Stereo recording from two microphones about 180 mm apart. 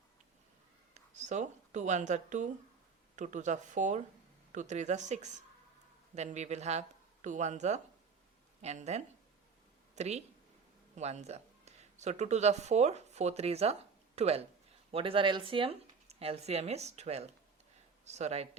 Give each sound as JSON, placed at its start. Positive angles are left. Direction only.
{"t": 1.1, "sound": "speech", "side_deg": -45}